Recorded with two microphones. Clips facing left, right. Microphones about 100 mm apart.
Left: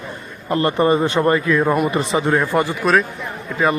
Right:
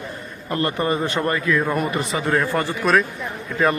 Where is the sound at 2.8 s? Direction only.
Centre (ahead or behind).